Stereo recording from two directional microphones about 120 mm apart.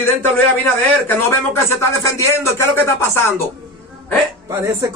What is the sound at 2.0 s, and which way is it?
Speech, 25° left (ahead or behind).